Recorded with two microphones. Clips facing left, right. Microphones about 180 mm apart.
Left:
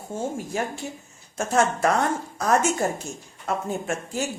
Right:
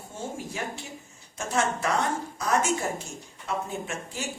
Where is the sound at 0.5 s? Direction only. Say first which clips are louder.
Left 6 dB; 45° left (ahead or behind).